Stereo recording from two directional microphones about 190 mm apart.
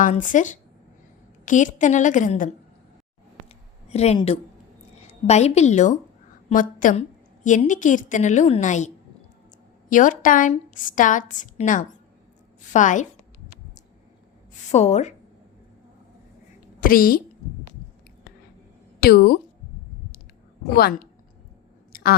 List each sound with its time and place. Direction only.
0.0 s a woman's voice: 45° left (ahead or behind)
3.8 s speech: 35° left (ahead or behind)
5.2 s a woman's voice: 35° left (ahead or behind)
9.9 s a woman's voice: 45° left (ahead or behind)
14.7 s a woman's voice: 35° left (ahead or behind)
16.8 s a woman's voice: 50° left (ahead or behind)
18.9 s speech: 55° left (ahead or behind)